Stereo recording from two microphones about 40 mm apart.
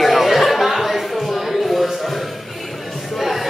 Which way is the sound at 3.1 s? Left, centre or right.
Centre.